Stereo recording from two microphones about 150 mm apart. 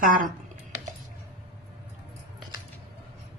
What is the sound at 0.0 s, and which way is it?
Speech, 65° right (ahead or behind).